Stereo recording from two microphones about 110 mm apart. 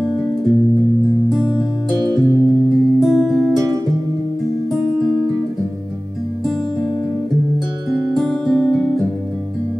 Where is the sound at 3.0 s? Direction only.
Centre (ahead or behind).